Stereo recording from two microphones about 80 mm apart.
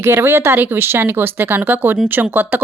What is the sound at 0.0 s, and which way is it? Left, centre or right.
Speech, right.